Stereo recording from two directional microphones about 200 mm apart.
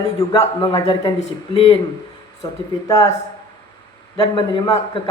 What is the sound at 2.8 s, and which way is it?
Speech, 15° left (ahead or behind).